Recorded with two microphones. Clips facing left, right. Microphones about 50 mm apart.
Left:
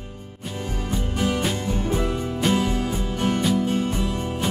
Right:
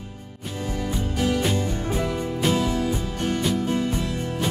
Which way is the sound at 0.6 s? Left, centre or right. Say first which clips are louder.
Right 1 dB; left.